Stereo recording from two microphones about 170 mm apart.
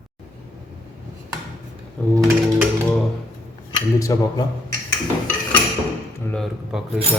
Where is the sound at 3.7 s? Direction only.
20° left (ahead or behind).